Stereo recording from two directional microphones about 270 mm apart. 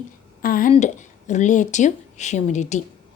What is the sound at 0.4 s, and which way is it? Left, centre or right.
A woman's voice, left.